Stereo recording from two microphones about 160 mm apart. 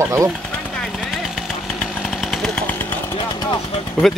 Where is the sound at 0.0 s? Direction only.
20° right (ahead or behind).